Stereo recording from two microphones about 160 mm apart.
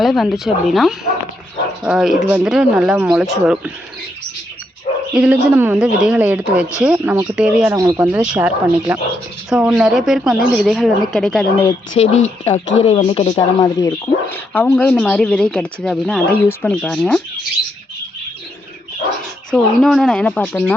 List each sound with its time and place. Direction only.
0.0 s a woman's voice: centre (ahead or behind)
5.1 s a woman's voice: 10° right (ahead or behind)
7.8 s speech: 20° right (ahead or behind)
8.0 s a woman's voice: 10° right (ahead or behind)
11.9 s speech: 45° left (ahead or behind)
13.3 s a woman's voice: 25° left (ahead or behind); by 17.2 s 5° left (ahead or behind)
19.5 s speech: 5° left (ahead or behind)